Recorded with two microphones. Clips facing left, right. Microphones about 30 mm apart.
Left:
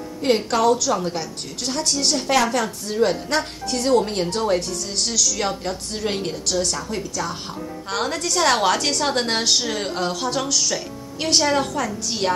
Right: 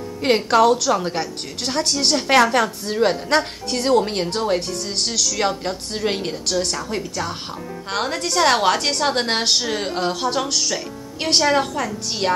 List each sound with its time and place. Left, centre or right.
0.2 s a woman's voice: right
3.9 s a woman's voice: right
5.1 s a woman's voice: right
5.7 s speech: centre
6.6 s a woman's voice: right; by 12.3 s centre